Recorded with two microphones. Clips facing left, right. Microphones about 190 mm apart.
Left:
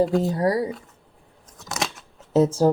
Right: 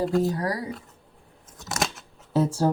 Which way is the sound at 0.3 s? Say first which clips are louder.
Left 7 dB; 25° left (ahead or behind).